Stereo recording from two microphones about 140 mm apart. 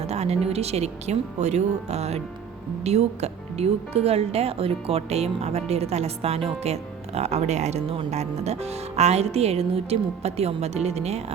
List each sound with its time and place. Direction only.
0.0 s speech: 50° right (ahead or behind)